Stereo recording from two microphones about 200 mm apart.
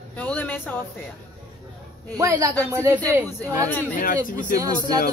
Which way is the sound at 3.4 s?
10° left (ahead or behind).